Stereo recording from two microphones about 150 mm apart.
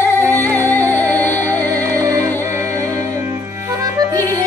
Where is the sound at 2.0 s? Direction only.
20° right (ahead or behind).